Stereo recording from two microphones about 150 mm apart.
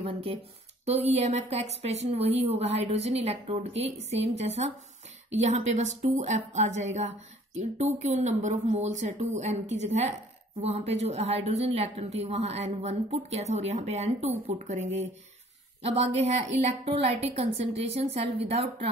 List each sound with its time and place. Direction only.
0.0 s speech: 40° right (ahead or behind)